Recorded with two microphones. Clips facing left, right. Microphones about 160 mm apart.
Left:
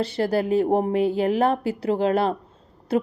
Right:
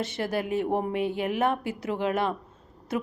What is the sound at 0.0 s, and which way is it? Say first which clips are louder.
A woman's voice: left 6 dB; 35° left (ahead or behind).